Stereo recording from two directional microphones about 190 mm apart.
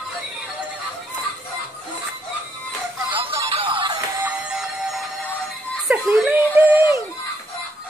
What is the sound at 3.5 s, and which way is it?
Music, 25° right (ahead or behind).